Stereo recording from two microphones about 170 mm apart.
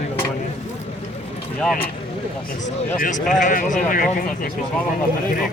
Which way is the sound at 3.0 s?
50° left (ahead or behind).